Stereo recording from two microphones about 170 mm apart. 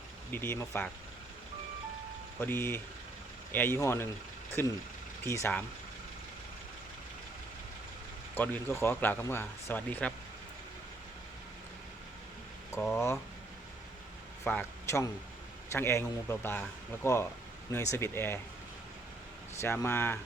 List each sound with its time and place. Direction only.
0.3 s speech: 10° left (ahead or behind)
2.4 s speech: 15° left (ahead or behind)
8.4 s speech: 15° left (ahead or behind)
12.8 s speech: 10° left (ahead or behind)
14.4 s speech: 15° left (ahead or behind)
19.6 s speech: 15° left (ahead or behind)